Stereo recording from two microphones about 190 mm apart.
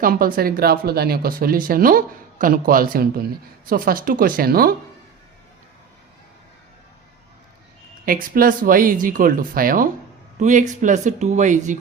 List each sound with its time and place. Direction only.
0.0 s speech: 50° right (ahead or behind)
8.0 s speech: 50° right (ahead or behind)